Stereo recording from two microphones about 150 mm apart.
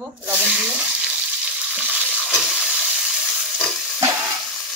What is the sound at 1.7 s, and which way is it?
Frying, 5° right (ahead or behind).